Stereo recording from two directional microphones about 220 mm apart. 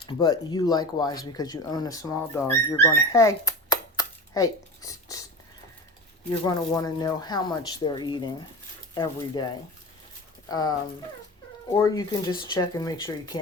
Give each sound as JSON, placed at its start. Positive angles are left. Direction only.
{"t": 0.0, "sound": "speech", "side_deg": 20}
{"t": 6.4, "sound": "speech", "side_deg": 20}
{"t": 10.5, "sound": "speech", "side_deg": 15}